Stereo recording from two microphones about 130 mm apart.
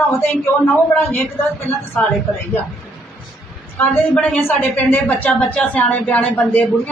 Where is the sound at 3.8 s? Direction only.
10° left (ahead or behind).